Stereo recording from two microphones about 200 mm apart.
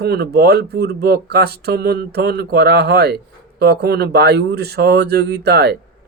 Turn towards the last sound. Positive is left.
turn(degrees=-55)  # may be behind; listen again after turning